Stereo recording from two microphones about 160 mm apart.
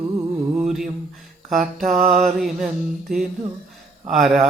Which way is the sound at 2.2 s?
5° right (ahead or behind).